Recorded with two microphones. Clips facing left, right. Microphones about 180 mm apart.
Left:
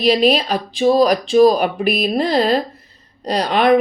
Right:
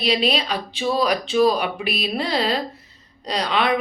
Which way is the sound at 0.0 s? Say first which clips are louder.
Left 7 dB; 45° left (ahead or behind).